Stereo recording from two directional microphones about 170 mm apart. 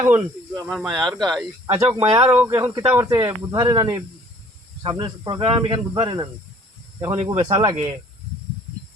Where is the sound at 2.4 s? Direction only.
15° right (ahead or behind).